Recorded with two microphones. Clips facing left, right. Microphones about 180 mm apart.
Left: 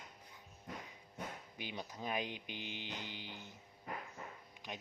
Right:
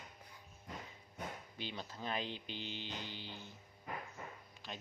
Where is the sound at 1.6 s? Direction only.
15° left (ahead or behind).